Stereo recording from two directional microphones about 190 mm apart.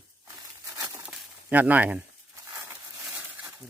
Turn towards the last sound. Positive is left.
turn(degrees=-10)  # may be behind; listen again after turning